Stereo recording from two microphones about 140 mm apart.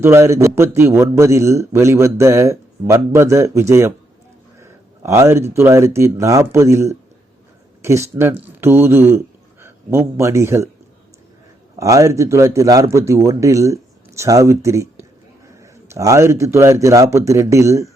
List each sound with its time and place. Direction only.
0.0 s speech: 20° right (ahead or behind)
11.8 s speech: 20° right (ahead or behind)